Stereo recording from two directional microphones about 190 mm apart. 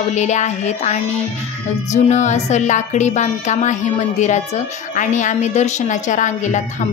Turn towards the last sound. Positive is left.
turn(degrees=40)  # may be behind; listen again after turning